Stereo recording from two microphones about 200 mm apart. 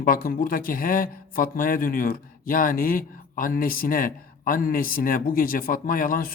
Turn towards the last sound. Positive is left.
turn(degrees=45)  # may be behind; listen again after turning